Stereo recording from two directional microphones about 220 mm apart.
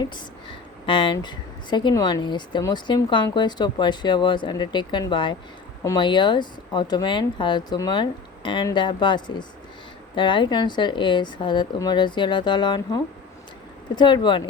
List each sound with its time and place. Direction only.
0.9 s speech: 20° left (ahead or behind)